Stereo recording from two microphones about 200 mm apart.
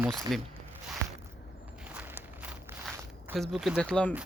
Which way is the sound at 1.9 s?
5° right (ahead or behind).